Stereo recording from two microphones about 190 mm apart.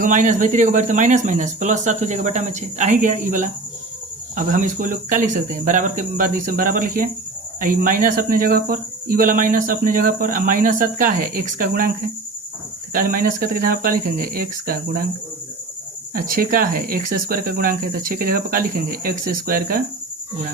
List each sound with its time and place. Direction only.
0.0 s speech: 45° right (ahead or behind)
12.9 s speech: 50° right (ahead or behind)
16.1 s speech: 50° right (ahead or behind)